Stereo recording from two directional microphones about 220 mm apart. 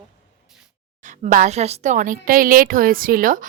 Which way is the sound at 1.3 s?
35° right (ahead or behind).